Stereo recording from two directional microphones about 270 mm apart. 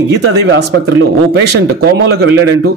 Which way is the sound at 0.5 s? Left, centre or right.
Right.